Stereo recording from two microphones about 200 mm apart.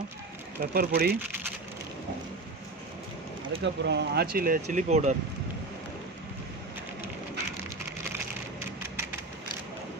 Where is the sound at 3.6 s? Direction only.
60° right (ahead or behind); by 5.2 s 35° right (ahead or behind).